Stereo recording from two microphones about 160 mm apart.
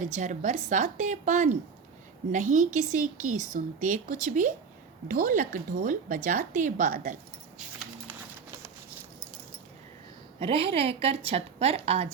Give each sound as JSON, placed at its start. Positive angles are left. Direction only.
{"t": 0.0, "sound": "a woman's voice", "side_deg": -50}
{"t": 10.4, "sound": "a woman's voice", "side_deg": -35}